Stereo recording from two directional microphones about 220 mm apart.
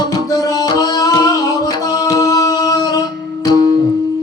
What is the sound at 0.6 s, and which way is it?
Music, 15° left (ahead or behind).